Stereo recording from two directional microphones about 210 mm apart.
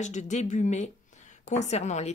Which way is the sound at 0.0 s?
35° left (ahead or behind).